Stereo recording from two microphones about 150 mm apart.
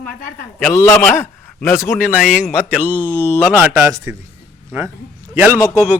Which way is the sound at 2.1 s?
5° right (ahead or behind).